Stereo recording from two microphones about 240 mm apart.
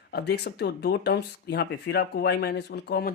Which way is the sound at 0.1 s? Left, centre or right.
Left.